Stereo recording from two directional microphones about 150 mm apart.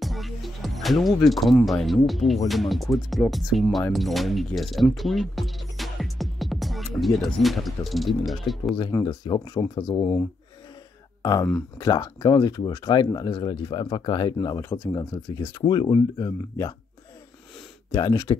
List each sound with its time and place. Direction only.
0.0 s speech: centre (ahead or behind)
9.0 s speech: 30° left (ahead or behind)
11.8 s speech: 25° left (ahead or behind)
17.9 s speech: 20° left (ahead or behind)